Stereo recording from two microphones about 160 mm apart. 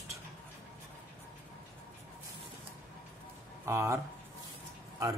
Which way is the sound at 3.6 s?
15° right (ahead or behind).